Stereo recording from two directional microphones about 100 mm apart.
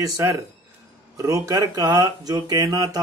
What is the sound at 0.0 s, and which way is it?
Speech, 30° right (ahead or behind).